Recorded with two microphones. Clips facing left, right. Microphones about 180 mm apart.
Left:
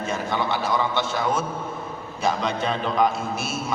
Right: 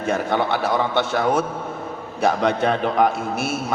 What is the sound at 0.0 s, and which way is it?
A man's voice, 60° right (ahead or behind).